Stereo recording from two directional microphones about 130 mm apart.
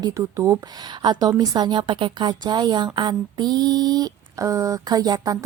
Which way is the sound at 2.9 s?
35° right (ahead or behind).